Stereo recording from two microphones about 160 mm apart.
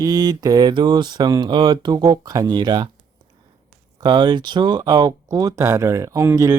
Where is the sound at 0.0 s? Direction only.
25° right (ahead or behind).